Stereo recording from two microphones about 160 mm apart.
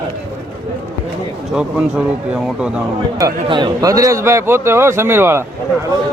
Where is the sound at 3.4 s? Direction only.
30° right (ahead or behind).